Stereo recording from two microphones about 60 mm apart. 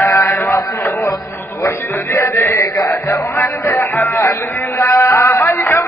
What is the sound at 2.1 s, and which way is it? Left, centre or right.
Music, left.